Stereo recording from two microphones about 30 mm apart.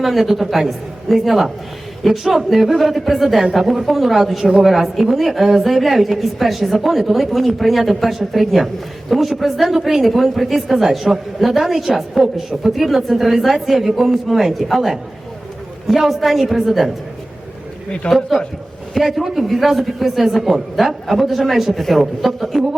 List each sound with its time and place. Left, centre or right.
0.0 s a woman's voice: centre
18.0 s a man's voice: left
18.9 s a woman's voice: centre